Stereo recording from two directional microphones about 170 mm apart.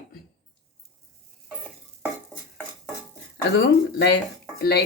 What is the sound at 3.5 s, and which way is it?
Speech, 90° left.